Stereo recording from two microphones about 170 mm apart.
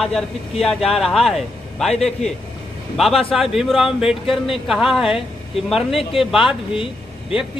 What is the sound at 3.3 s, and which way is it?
Speech, centre (ahead or behind).